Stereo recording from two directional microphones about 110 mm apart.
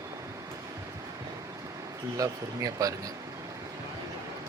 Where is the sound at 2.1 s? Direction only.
30° right (ahead or behind).